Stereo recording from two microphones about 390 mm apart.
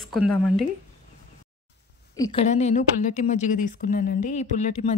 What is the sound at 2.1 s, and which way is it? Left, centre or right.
A woman's voice, centre.